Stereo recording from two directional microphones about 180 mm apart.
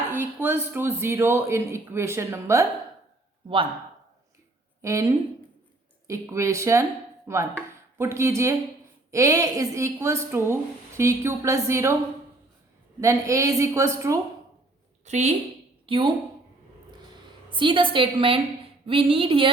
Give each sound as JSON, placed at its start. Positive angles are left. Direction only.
{"t": 0.1, "sound": "a woman's voice", "side_deg": -10}
{"t": 4.8, "sound": "a woman's voice", "side_deg": -15}
{"t": 13.0, "sound": "a woman's voice", "side_deg": -15}
{"t": 15.0, "sound": "a woman's voice", "side_deg": -40}
{"t": 15.9, "sound": "a woman's voice", "side_deg": -30}
{"t": 17.5, "sound": "a woman's voice", "side_deg": -25}